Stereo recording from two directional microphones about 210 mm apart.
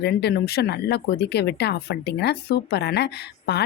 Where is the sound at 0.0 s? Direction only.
50° left (ahead or behind).